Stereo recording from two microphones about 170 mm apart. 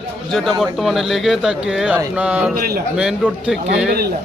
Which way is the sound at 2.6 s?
60° right (ahead or behind).